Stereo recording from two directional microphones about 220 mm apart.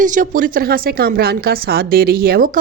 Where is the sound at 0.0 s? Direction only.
35° right (ahead or behind).